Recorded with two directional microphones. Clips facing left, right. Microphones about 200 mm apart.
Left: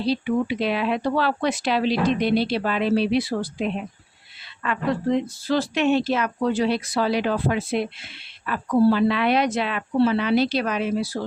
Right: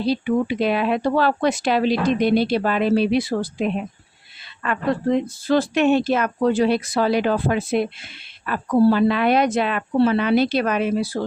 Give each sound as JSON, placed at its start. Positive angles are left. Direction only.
{"t": 0.0, "sound": "speech", "side_deg": -50}